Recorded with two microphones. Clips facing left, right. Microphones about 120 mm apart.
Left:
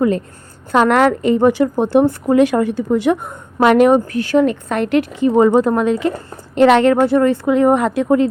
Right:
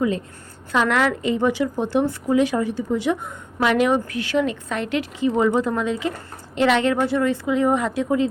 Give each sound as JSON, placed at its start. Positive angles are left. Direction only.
{"t": 0.7, "sound": "a woman's voice", "side_deg": 50}